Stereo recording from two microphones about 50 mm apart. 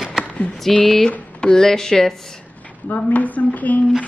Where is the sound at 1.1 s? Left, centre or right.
Left.